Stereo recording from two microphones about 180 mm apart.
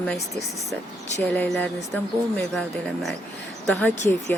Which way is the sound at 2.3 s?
5° left (ahead or behind).